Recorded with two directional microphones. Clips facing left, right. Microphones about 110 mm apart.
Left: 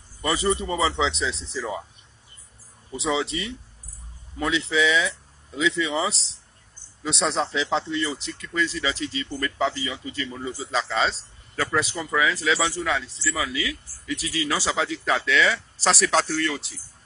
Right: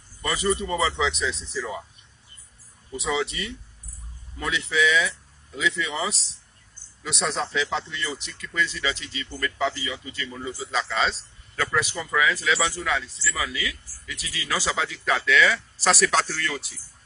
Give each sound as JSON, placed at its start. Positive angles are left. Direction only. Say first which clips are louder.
{"t": 0.2, "sound": "speech", "louder": "left 1 dB", "side_deg": 25}
{"t": 3.0, "sound": "speech", "louder": "left 2 dB", "side_deg": 25}
{"t": 15.9, "sound": "speech", "louder": "even", "side_deg": 0}
{"t": 16.3, "sound": "speech", "louder": "left 5 dB", "side_deg": 20}